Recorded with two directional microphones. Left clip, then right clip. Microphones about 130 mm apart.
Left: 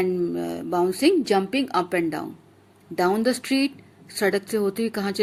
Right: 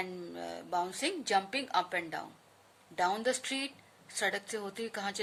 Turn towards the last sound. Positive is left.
turn(degrees=25)  # may be behind; listen again after turning